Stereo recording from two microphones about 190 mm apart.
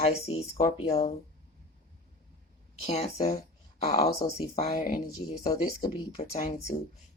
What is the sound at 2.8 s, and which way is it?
Speech, 35° left (ahead or behind).